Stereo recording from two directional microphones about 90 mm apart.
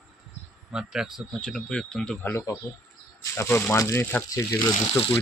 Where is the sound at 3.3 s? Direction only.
30° left (ahead or behind).